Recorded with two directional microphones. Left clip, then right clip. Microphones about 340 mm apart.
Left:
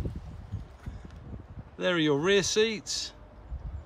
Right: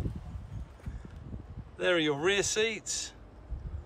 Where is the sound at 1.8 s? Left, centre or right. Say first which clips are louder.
Left 1 dB; centre.